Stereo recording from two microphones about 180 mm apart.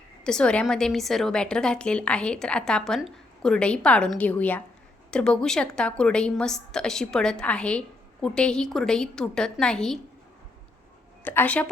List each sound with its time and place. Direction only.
0.3 s a woman's voice: 5° left (ahead or behind)
11.2 s a woman's voice: 10° left (ahead or behind)